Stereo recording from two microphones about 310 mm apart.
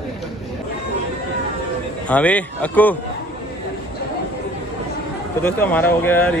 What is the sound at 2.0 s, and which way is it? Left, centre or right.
Speech, centre.